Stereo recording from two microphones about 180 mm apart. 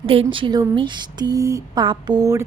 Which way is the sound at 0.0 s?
30° right (ahead or behind).